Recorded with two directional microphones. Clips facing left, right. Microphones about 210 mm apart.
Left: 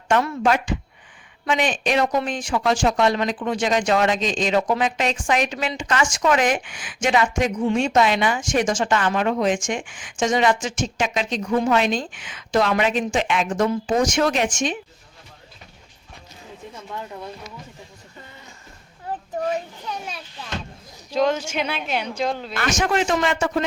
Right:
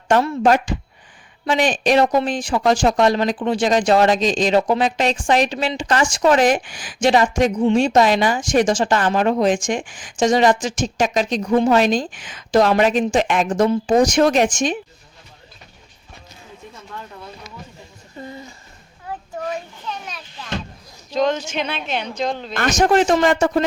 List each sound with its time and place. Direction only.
0.1 s a woman's voice: 35° right (ahead or behind)
19.8 s children playing: 10° left (ahead or behind)
21.1 s speech: 10° left (ahead or behind)
22.5 s a woman's voice: 40° right (ahead or behind)